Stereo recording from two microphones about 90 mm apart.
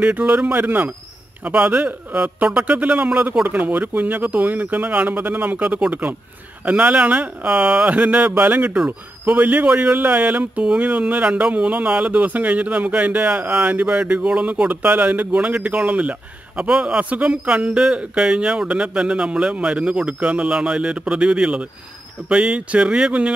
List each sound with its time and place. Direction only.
0.0 s speech: 15° right (ahead or behind)